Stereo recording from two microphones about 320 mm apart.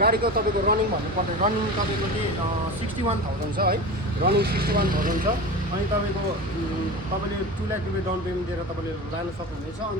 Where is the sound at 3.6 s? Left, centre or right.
Right.